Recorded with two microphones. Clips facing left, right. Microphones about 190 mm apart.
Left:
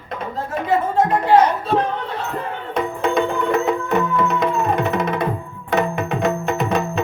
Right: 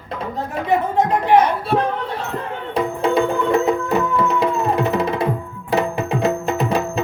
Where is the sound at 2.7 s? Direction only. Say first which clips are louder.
Right 2 dB; 30° right (ahead or behind).